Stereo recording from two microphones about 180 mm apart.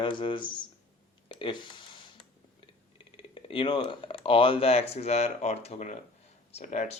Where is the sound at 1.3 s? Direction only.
25° left (ahead or behind).